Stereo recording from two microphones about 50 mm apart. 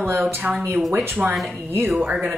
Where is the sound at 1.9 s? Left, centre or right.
Right.